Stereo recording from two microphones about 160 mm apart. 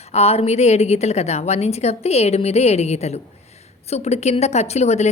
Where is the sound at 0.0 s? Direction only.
40° left (ahead or behind).